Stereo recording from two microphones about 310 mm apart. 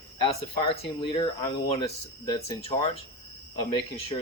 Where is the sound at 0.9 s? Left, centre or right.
Centre.